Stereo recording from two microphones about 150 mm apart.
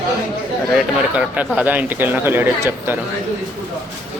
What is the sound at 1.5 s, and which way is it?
Speech, 10° right (ahead or behind).